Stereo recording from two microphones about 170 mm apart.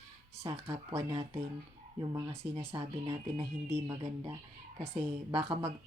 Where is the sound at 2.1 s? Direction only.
30° right (ahead or behind).